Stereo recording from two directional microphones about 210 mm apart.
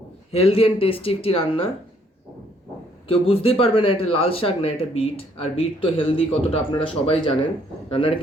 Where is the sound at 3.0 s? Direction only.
25° left (ahead or behind).